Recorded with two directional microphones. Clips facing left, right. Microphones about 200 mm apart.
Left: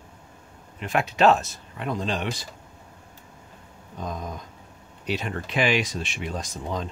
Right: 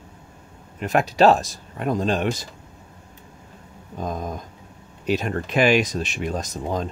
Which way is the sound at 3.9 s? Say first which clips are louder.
Right 5 dB; 50° right (ahead or behind).